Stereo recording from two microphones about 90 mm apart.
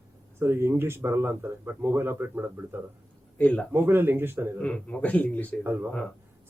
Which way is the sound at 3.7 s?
25° right (ahead or behind).